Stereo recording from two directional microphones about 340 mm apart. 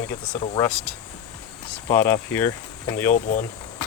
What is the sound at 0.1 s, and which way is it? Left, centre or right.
Speech, centre.